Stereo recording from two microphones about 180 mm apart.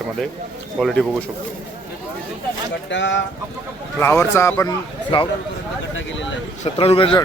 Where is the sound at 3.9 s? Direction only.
15° left (ahead or behind).